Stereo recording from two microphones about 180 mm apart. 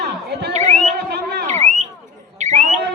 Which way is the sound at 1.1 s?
65° right (ahead or behind).